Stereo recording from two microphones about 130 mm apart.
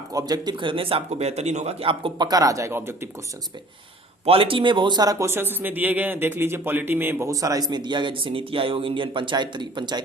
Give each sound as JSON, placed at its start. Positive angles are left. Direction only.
{"t": 0.1, "sound": "a man's voice", "side_deg": -30}
{"t": 4.3, "sound": "a man's voice", "side_deg": -45}